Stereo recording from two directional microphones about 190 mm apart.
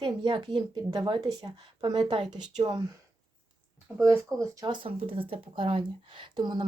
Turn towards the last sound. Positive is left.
turn(degrees=-25)  # may be behind; listen again after turning